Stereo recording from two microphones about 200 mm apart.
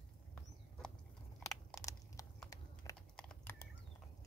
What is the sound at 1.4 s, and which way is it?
Crushing, 15° left (ahead or behind).